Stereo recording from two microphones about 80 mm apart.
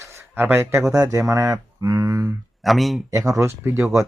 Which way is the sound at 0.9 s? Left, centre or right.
Right.